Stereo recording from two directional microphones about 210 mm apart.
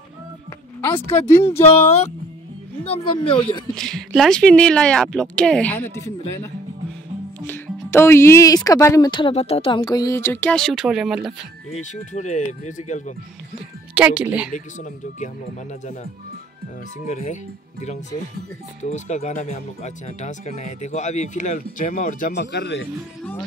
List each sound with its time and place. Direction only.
0.7 s speech: 10° left (ahead or behind)
3.3 s speech: 25° left (ahead or behind)
3.7 s speech: centre (ahead or behind)
7.4 s speech: 10° left (ahead or behind)
11.8 s speech: 35° left (ahead or behind)
13.9 s speech: 5° right (ahead or behind)
14.5 s speech: 35° left (ahead or behind)
17.1 s speech: 35° left (ahead or behind)
22.3 s speech: 50° left (ahead or behind)